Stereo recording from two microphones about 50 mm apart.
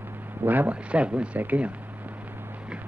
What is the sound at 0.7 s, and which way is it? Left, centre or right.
Speech, right.